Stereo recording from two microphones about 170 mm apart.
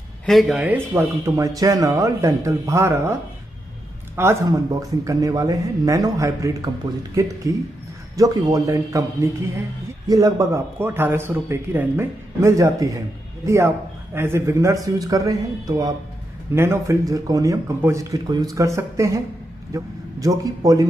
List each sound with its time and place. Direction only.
0.3 s a man's voice: centre (ahead or behind)
4.2 s a man's voice: 15° right (ahead or behind)
14.1 s a man's voice: 15° right (ahead or behind)